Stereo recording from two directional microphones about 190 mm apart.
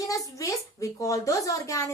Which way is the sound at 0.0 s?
15° left (ahead or behind).